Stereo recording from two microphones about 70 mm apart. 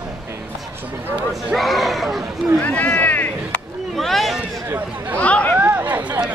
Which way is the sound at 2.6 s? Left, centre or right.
Centre.